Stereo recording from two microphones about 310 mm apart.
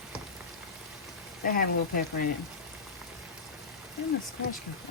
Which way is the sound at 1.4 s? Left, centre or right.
Left.